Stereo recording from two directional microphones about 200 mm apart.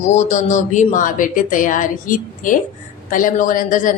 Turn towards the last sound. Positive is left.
turn(degrees=40)  # may be behind; listen again after turning